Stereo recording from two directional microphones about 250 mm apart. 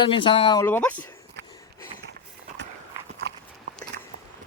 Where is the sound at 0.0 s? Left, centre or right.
Centre.